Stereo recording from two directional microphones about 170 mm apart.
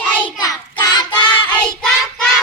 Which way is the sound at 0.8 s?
25° left (ahead or behind).